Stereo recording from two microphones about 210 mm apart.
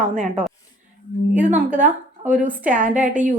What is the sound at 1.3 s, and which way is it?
Speech, 5° right (ahead or behind).